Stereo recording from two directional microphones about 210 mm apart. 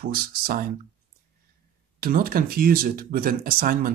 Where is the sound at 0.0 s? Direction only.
45° right (ahead or behind).